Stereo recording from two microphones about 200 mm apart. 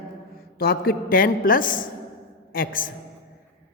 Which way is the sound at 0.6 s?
50° left (ahead or behind).